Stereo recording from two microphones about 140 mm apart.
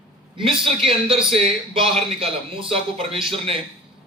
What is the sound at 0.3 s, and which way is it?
A man's voice, 40° right (ahead or behind).